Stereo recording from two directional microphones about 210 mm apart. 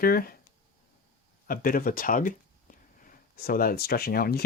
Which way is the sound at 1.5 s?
45° left (ahead or behind).